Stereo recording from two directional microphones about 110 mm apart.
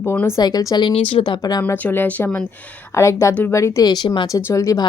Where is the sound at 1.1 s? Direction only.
55° left (ahead or behind).